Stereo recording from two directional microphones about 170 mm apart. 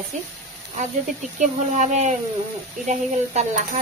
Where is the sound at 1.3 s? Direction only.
45° right (ahead or behind).